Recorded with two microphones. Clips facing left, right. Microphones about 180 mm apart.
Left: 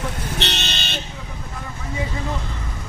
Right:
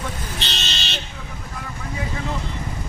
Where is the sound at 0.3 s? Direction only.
65° left (ahead or behind).